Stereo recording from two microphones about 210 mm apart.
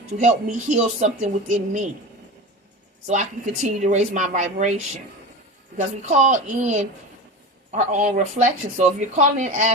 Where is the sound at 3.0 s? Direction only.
35° right (ahead or behind).